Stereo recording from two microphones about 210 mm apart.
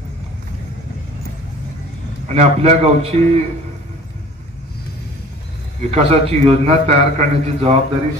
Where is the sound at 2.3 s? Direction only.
30° right (ahead or behind).